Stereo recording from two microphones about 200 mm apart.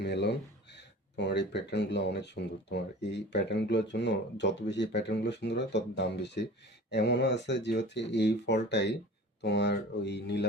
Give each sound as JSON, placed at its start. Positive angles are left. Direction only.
{"t": 0.0, "sound": "speech", "side_deg": 60}